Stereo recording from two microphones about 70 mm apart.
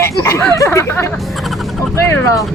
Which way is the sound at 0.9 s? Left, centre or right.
Left.